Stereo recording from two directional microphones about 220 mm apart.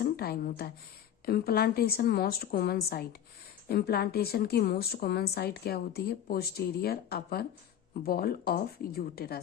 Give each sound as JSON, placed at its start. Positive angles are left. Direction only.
{"t": 0.0, "sound": "a woman's voice", "side_deg": 45}